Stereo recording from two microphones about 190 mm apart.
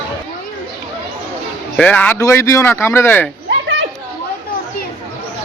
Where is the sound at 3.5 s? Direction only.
70° right (ahead or behind).